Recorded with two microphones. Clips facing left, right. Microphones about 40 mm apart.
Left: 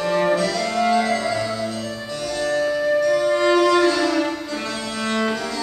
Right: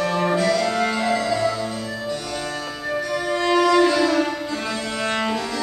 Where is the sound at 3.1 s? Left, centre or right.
Centre.